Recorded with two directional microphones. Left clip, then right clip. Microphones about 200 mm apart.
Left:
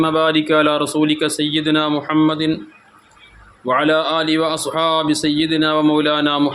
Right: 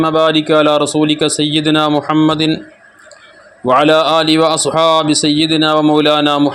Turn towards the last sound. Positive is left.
turn(degrees=-25)  # may be behind; listen again after turning